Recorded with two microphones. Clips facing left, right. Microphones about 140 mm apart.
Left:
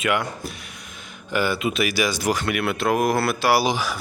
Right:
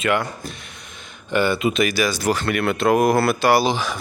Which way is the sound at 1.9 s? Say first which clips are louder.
Right 2 dB; 15° left (ahead or behind).